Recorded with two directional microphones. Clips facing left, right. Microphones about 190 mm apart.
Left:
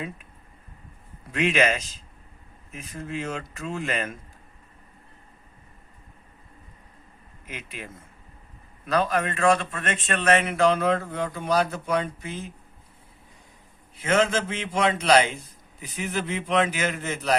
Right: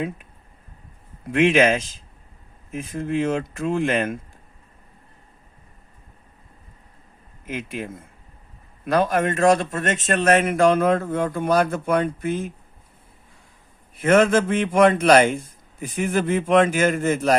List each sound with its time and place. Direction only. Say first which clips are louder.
1.3 s speech: right 6 dB; 50° right (ahead or behind)
2.9 s speech: right 9 dB; 55° right (ahead or behind)
8.9 s speech: right 4 dB; 50° right (ahead or behind)
13.9 s speech: right 6 dB; 50° right (ahead or behind)